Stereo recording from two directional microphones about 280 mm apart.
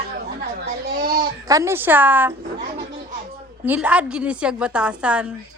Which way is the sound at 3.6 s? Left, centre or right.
Centre.